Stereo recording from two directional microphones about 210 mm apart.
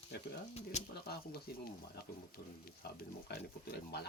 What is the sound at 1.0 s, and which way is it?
Speech, 45° left (ahead or behind).